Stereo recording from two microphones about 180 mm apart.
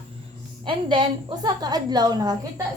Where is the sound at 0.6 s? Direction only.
25° right (ahead or behind).